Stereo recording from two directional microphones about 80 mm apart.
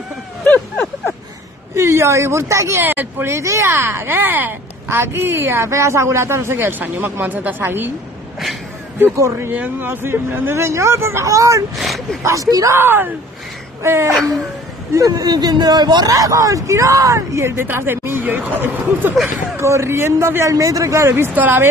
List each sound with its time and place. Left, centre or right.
1.8 s a woman's voice: right
9.1 s speech: right
9.5 s speech: right
11.7 s speech: centre
12.2 s speech: right
12.7 s a woman's voice: right
14.1 s speech: centre
14.9 s speech: right
19.5 s speech: right
21.0 s a woman's voice: right